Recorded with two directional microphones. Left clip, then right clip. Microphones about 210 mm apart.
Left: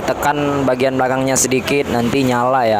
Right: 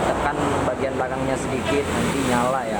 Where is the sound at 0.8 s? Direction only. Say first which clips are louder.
Left 8 dB; 50° left (ahead or behind).